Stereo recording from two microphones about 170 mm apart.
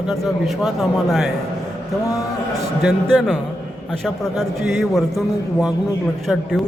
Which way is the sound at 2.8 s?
Centre (ahead or behind).